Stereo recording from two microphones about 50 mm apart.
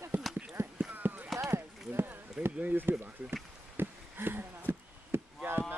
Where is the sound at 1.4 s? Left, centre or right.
Right.